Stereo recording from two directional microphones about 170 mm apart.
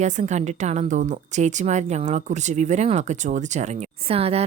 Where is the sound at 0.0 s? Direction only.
45° right (ahead or behind).